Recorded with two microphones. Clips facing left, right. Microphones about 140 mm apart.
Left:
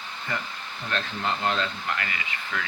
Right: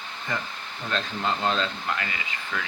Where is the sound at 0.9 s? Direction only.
25° right (ahead or behind).